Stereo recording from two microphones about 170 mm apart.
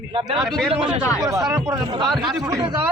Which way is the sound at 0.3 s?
5° left (ahead or behind).